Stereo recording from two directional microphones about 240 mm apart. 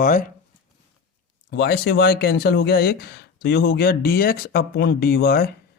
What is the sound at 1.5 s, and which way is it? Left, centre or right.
Speech, left.